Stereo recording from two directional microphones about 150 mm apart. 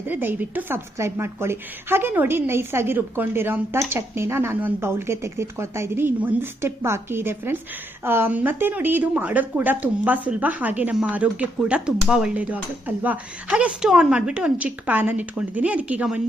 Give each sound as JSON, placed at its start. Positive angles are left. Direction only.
{"t": 0.1, "sound": "a woman's voice", "side_deg": -15}